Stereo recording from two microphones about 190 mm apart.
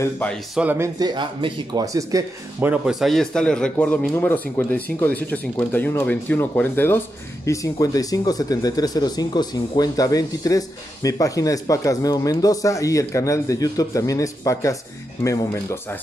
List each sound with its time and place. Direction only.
0.0 s speech: 10° left (ahead or behind)
0.6 s speech: 10° right (ahead or behind)
0.9 s speech: 25° right (ahead or behind); by 15.8 s 15° left (ahead or behind)